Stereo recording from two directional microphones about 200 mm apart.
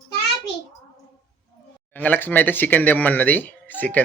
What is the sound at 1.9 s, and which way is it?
Speech, 10° left (ahead or behind).